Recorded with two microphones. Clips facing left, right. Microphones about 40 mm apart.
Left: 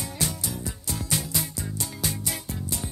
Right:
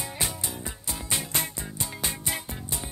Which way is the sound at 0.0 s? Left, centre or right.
Right.